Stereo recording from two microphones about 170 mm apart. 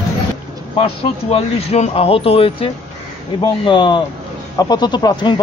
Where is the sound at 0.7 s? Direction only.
35° left (ahead or behind).